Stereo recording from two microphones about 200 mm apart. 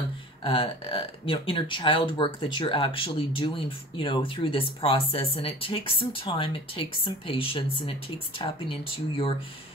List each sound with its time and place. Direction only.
0.4 s speech: 25° left (ahead or behind)